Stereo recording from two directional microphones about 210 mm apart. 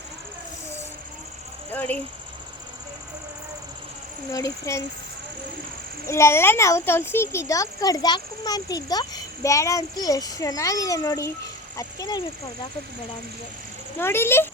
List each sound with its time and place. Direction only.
4.3 s a child's voice: 15° left (ahead or behind)
6.1 s a child's voice: 15° left (ahead or behind)
14.0 s a child's voice: 10° left (ahead or behind)